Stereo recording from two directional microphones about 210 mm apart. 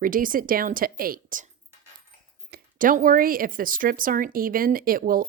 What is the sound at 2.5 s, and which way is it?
A woman's voice, 40° right (ahead or behind).